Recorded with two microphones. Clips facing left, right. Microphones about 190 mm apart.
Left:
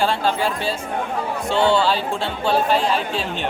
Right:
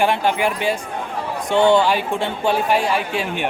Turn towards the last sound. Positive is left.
turn(degrees=-15)  # may be behind; listen again after turning